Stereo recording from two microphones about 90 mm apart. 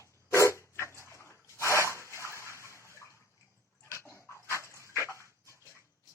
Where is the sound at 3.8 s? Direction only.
30° left (ahead or behind).